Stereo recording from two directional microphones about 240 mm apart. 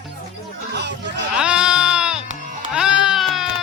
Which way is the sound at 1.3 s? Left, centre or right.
Centre.